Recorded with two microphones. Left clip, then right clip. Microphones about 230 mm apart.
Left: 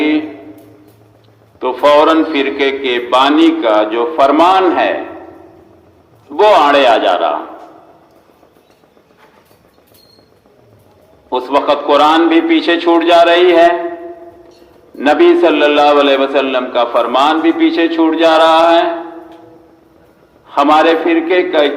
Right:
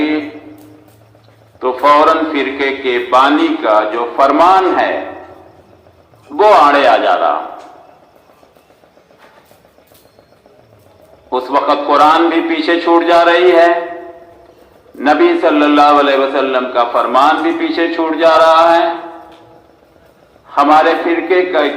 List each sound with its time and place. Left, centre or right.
1.5 s a man's voice: left
6.3 s a man's voice: left
11.3 s a man's voice: left
14.9 s a man's voice: left
20.5 s a man's voice: left